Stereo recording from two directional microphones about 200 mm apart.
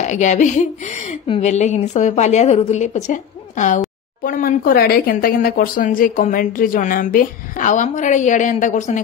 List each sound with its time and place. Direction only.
0.0 s a woman's voice: 35° left (ahead or behind)